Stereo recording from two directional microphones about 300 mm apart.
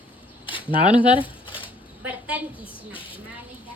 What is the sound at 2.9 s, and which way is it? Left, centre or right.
Speech, centre.